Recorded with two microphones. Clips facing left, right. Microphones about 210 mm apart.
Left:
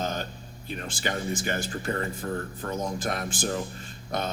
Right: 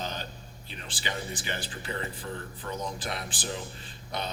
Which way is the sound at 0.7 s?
45° left (ahead or behind).